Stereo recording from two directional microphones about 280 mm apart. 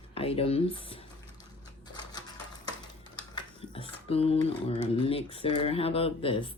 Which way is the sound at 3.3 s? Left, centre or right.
Centre.